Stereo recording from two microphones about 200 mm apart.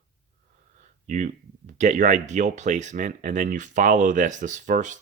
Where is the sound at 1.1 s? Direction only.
40° right (ahead or behind).